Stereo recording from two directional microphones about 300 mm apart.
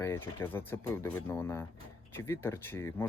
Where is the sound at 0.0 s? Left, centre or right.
Centre.